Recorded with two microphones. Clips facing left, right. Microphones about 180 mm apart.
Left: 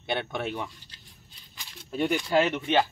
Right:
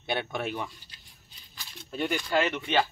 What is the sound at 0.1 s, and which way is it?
Speech, 5° right (ahead or behind).